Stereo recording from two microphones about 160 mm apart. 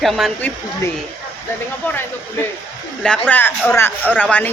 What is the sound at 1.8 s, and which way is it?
Speech, 10° left (ahead or behind).